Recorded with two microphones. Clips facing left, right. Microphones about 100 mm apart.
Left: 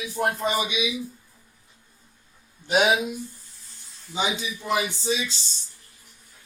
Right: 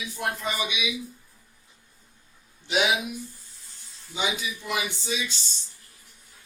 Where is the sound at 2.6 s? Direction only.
45° left (ahead or behind).